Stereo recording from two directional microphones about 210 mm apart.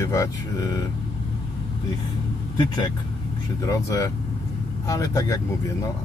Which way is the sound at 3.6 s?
15° left (ahead or behind).